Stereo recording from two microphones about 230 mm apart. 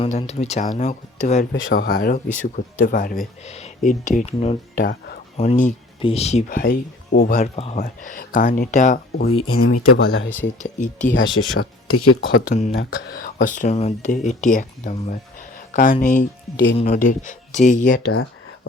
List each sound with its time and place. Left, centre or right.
0.0 s speech: left
4.7 s speech: left
5.4 s speech: left
11.4 s speech: left
12.2 s speech: left